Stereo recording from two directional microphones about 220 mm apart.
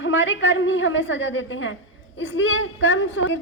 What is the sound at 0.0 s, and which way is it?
A woman's voice, 60° left (ahead or behind).